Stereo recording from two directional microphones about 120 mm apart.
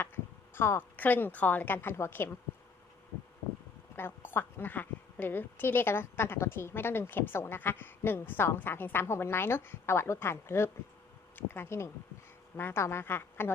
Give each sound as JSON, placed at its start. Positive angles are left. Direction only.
{"t": 0.5, "sound": "a woman's voice", "side_deg": 20}
{"t": 3.9, "sound": "a woman's voice", "side_deg": 20}